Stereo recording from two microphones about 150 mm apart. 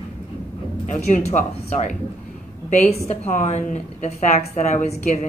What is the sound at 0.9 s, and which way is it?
A woman's voice, 50° left (ahead or behind).